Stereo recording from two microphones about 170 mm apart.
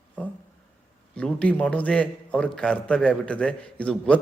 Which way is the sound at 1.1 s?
5° left (ahead or behind).